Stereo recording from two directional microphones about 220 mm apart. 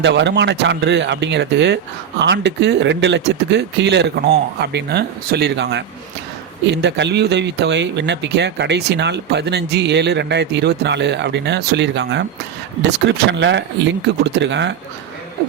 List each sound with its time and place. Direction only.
0.0 s speech: 50° right (ahead or behind)